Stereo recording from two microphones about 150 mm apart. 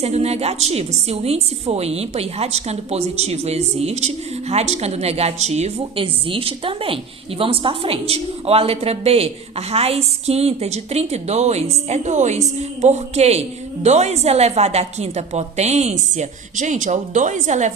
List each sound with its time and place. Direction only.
0.0 s a woman's voice: 45° right (ahead or behind)